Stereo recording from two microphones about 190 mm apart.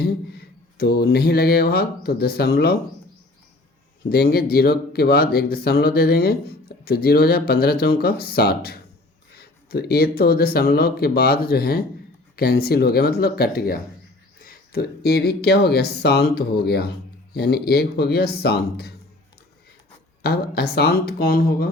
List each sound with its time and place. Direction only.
0.0 s speech: 55° left (ahead or behind)
4.1 s speech: 55° left (ahead or behind)
20.2 s speech: 55° left (ahead or behind)